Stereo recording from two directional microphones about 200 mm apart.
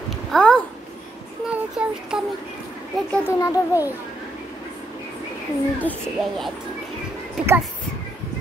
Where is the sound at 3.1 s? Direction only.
15° left (ahead or behind).